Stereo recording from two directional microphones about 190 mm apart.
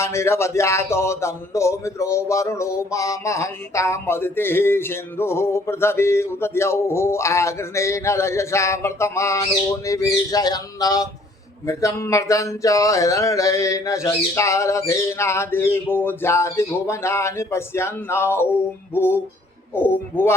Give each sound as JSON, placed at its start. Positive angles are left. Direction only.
{"t": 0.0, "sound": "speech", "side_deg": 15}
{"t": 9.8, "sound": "a sound", "side_deg": 15}
{"t": 11.6, "sound": "speech", "side_deg": 15}
{"t": 19.7, "sound": "speech", "side_deg": 10}